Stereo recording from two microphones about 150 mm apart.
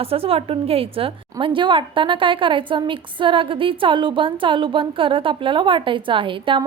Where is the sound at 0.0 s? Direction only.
40° right (ahead or behind).